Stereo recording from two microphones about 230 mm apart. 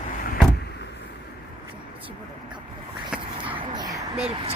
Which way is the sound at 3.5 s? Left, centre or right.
Centre.